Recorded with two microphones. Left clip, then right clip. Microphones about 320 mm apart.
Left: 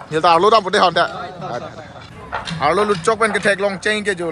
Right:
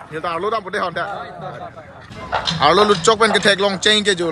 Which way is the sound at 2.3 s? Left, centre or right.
Right.